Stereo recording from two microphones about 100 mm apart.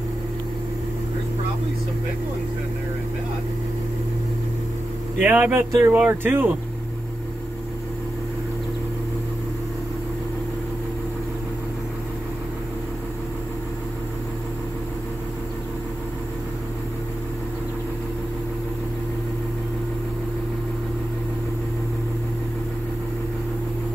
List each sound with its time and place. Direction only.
5.2 s speech: 20° right (ahead or behind)